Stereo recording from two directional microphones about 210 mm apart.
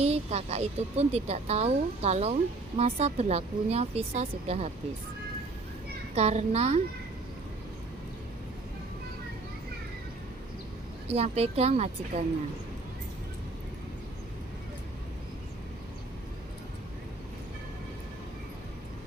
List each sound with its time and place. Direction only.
0.0 s speech: 30° right (ahead or behind)
6.1 s speech: 30° right (ahead or behind)
11.1 s speech: 30° right (ahead or behind)